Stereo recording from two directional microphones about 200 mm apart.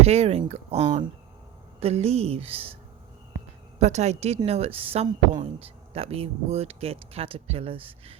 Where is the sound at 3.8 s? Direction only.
35° right (ahead or behind).